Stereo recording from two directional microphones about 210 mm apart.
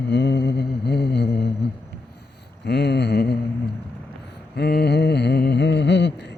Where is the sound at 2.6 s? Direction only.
50° left (ahead or behind).